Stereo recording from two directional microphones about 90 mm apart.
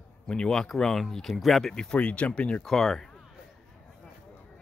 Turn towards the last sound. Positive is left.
turn(degrees=5)  # may be behind; listen again after turning